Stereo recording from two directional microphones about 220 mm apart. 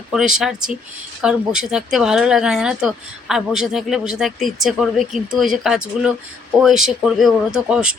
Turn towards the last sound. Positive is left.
turn(degrees=-5)  # may be behind; listen again after turning